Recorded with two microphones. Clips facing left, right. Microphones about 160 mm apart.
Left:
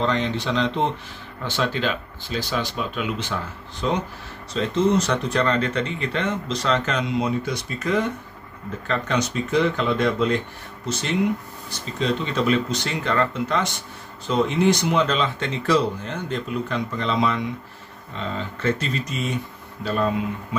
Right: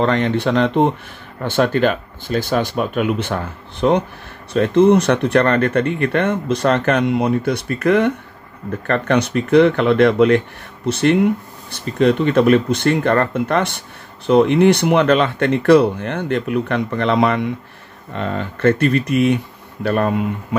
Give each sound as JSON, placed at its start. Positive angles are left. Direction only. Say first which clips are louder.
{"t": 0.0, "sound": "speech", "louder": "right 7 dB", "side_deg": -60}